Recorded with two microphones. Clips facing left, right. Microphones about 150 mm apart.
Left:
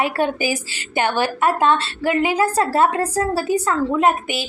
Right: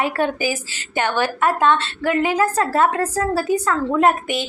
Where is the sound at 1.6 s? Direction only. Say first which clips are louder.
Even; 35° left (ahead or behind).